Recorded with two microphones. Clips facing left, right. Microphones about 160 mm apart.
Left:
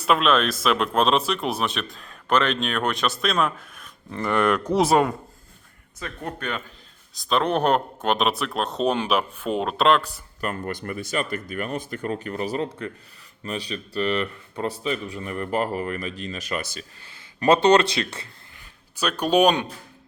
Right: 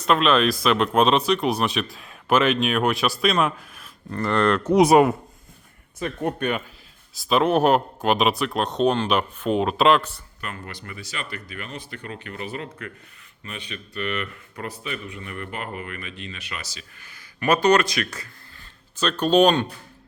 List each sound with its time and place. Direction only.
0.0 s speech: 5° left (ahead or behind)
4.9 s speech: 20° right (ahead or behind)
7.3 s speech: 5° right (ahead or behind)
10.4 s speech: 50° left (ahead or behind)
17.0 s speech: 30° left (ahead or behind)
18.6 s speech: 10° left (ahead or behind)